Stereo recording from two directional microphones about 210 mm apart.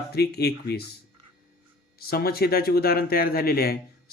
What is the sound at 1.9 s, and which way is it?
Speech, 45° left (ahead or behind).